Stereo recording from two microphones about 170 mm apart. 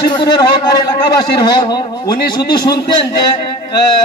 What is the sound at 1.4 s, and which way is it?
A man's voice, 25° left (ahead or behind).